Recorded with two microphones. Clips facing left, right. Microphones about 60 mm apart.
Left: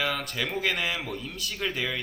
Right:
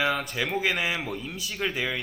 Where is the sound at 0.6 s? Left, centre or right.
Centre.